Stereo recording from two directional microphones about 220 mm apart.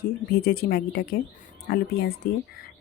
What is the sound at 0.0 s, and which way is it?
Speech, 45° left (ahead or behind).